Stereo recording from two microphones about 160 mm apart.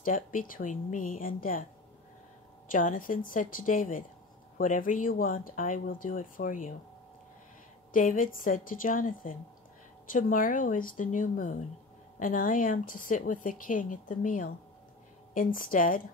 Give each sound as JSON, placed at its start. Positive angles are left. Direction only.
{"t": 0.0, "sound": "a woman's voice", "side_deg": 60}
{"t": 2.7, "sound": "a woman's voice", "side_deg": 55}
{"t": 7.9, "sound": "a woman's voice", "side_deg": 60}